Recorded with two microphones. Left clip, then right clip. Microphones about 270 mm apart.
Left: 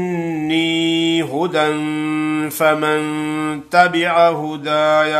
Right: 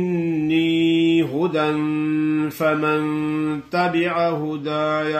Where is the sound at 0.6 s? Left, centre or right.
Left.